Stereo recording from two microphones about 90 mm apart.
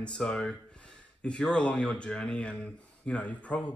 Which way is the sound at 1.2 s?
10° left (ahead or behind).